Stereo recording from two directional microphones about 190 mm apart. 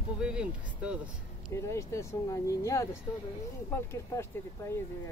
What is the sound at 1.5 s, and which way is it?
Speech, 15° left (ahead or behind).